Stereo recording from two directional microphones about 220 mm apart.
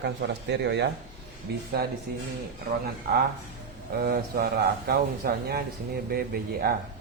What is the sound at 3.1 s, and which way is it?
A man's voice, 45° right (ahead or behind).